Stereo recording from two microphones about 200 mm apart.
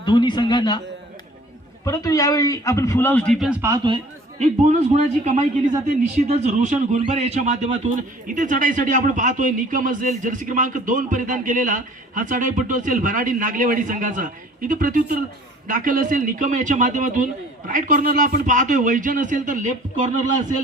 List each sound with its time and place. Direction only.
0.0 s a man's voice: 20° left (ahead or behind)
1.8 s a man's voice: 15° left (ahead or behind); by 3.6 s centre (ahead or behind)
3.6 s speech: 20° right (ahead or behind)
4.4 s a man's voice: 35° right (ahead or behind)